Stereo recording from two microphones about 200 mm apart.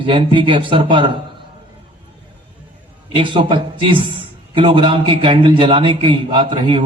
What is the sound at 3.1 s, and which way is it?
Speech, 25° right (ahead or behind).